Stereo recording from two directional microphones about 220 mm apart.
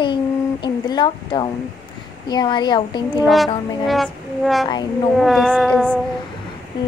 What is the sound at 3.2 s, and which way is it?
Music, centre (ahead or behind).